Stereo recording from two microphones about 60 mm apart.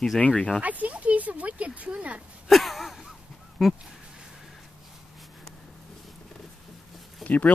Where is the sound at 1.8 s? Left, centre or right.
Right.